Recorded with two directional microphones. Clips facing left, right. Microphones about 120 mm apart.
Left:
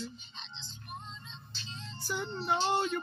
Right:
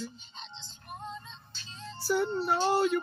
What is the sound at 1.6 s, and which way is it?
Music, 50° right (ahead or behind).